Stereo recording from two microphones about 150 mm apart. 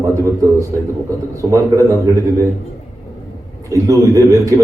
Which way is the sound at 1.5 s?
20° right (ahead or behind).